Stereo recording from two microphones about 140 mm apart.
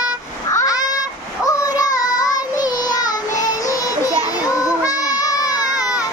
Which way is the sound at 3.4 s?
25° left (ahead or behind).